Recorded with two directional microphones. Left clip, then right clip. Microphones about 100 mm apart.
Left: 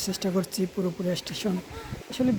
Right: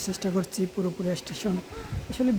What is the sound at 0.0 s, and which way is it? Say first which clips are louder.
Speech: left 1 dB; 10° left (ahead or behind).